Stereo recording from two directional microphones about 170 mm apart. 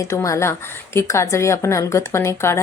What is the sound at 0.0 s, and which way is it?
Speech, 20° left (ahead or behind).